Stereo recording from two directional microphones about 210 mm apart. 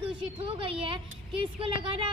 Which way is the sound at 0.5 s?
25° right (ahead or behind).